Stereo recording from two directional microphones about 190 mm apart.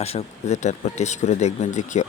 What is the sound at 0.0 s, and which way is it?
Speech, 35° left (ahead or behind).